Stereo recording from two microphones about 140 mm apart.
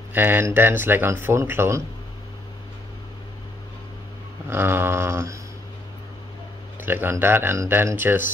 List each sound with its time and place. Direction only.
0.1 s speech: 15° right (ahead or behind)
4.5 s speech: 15° right (ahead or behind)
6.9 s speech: 15° right (ahead or behind)